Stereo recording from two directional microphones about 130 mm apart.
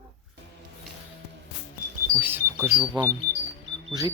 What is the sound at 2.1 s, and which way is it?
Speech, 15° right (ahead or behind).